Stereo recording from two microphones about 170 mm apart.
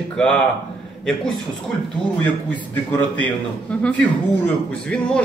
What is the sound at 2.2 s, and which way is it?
A man's voice, 10° left (ahead or behind).